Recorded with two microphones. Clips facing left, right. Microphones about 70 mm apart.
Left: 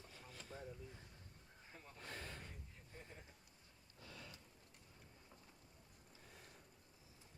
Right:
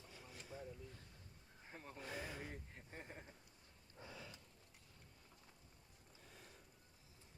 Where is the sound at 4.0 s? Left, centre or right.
Right.